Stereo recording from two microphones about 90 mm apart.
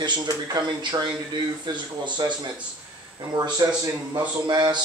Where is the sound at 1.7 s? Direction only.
55° right (ahead or behind).